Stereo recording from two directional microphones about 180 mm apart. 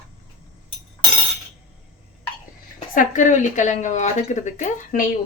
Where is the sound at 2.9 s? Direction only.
45° left (ahead or behind).